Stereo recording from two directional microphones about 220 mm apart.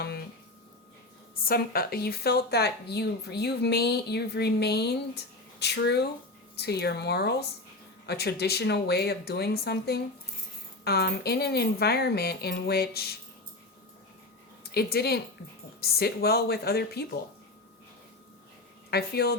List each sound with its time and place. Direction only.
1.4 s speech: 40° left (ahead or behind)
14.6 s speech: 45° left (ahead or behind)
18.9 s speech: 45° left (ahead or behind)